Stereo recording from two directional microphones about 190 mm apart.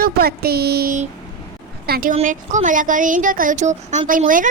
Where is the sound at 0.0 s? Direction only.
55° right (ahead or behind).